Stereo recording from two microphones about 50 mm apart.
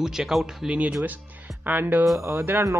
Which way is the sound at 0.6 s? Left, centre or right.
Right.